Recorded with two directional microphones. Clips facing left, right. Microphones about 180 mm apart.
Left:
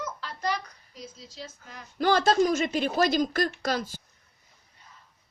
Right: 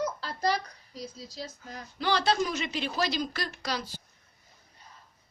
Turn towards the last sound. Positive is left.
turn(degrees=50)  # may be behind; listen again after turning